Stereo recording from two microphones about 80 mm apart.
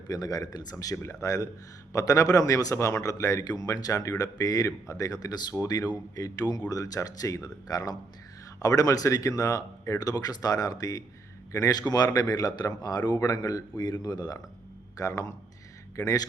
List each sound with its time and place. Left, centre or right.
0.1 s a man's voice: left
10.0 s a man's voice: left
13.1 s a man's voice: left